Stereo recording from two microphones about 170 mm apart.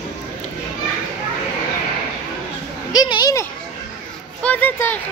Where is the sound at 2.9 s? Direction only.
25° left (ahead or behind).